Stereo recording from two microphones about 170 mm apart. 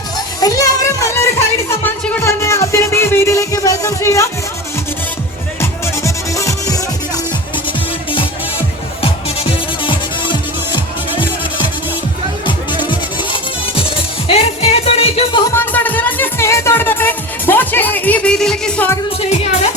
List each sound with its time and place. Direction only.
0.3 s children playing: 20° left (ahead or behind)
1.8 s music: 10° left (ahead or behind)
6.0 s music: 20° left (ahead or behind)
9.0 s music: 35° left (ahead or behind)
12.5 s music: 30° left (ahead or behind)
15.5 s music: 10° left (ahead or behind)
19.3 s music: 40° left (ahead or behind)